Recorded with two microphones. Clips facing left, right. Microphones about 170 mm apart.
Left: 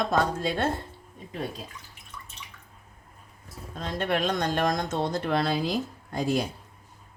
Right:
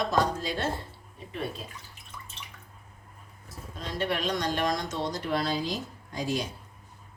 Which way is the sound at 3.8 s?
50° left (ahead or behind).